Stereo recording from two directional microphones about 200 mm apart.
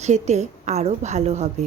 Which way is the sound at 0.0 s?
35° right (ahead or behind).